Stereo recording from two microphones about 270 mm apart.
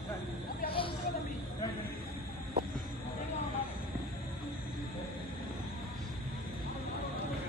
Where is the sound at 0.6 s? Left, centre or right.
Centre.